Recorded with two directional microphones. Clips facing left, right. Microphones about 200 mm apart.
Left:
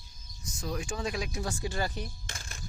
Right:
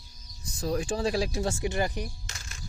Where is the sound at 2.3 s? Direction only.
50° left (ahead or behind).